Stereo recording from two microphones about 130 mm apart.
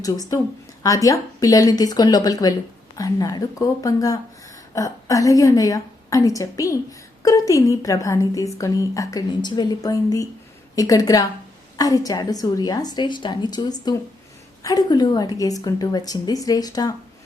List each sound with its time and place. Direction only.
0.0 s a woman's voice: 30° left (ahead or behind)